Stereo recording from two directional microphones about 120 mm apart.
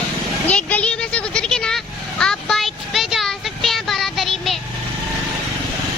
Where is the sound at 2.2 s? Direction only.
5° left (ahead or behind).